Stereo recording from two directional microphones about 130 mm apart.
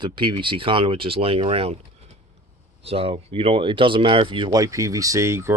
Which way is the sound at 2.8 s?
50° right (ahead or behind).